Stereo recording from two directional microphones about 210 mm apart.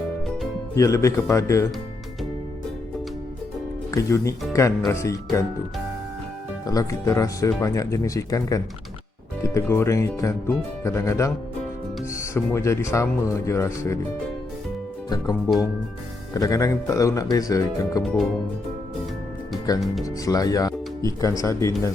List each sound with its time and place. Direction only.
0.8 s speech: 15° left (ahead or behind)
3.9 s speech: 15° left (ahead or behind)
6.7 s speech: 15° left (ahead or behind)
16.3 s speech: 15° left (ahead or behind)
18.0 s speech: centre (ahead or behind)
20.2 s speech: 15° left (ahead or behind)